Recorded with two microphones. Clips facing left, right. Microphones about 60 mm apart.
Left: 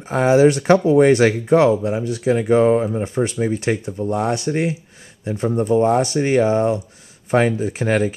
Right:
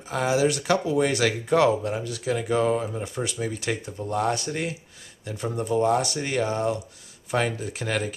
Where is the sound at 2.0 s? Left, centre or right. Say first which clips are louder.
Left 8 dB; left.